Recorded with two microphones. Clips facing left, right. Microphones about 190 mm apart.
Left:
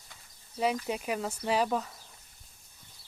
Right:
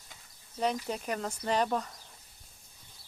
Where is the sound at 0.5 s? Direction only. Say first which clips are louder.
Left 2 dB; 5° left (ahead or behind).